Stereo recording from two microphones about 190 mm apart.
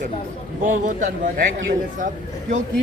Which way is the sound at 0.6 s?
45° right (ahead or behind).